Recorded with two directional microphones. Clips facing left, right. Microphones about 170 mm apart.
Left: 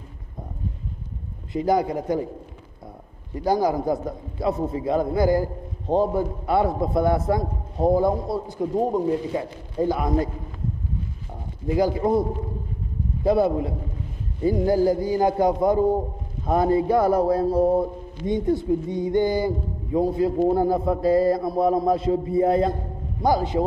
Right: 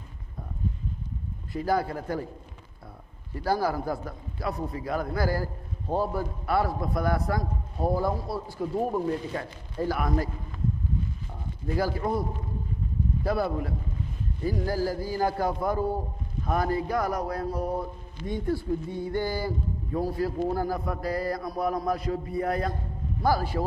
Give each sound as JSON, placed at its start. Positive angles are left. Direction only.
{"t": 1.5, "sound": "a man's voice", "side_deg": 20}
{"t": 3.3, "sound": "a man's voice", "side_deg": 15}
{"t": 11.6, "sound": "a man's voice", "side_deg": 15}